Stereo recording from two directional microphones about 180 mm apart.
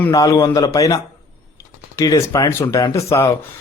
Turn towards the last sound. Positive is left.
turn(degrees=15)  # may be behind; listen again after turning